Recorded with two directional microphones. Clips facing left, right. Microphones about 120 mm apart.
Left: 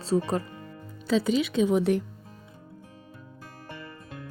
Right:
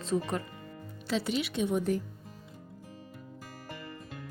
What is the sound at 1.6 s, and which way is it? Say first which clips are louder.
Speech: left 4 dB; 85° left.